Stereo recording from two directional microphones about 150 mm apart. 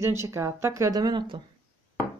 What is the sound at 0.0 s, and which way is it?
Speech, 20° right (ahead or behind).